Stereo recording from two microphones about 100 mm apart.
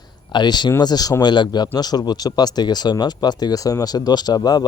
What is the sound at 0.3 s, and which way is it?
Speech, 45° left (ahead or behind).